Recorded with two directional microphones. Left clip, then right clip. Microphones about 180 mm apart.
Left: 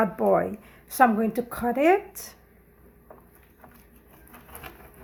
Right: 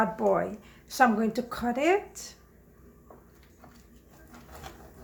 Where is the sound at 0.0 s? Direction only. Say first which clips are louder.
Left 3 dB; 45° left (ahead or behind).